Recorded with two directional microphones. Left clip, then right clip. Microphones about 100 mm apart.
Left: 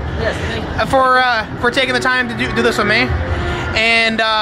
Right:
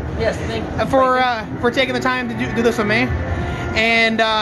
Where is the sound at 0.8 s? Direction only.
20° right (ahead or behind).